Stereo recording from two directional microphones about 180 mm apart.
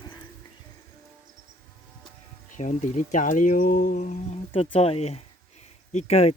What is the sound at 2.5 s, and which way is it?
Speech, 40° left (ahead or behind).